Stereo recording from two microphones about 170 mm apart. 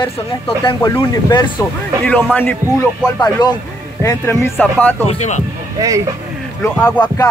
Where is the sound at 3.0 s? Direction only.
20° left (ahead or behind).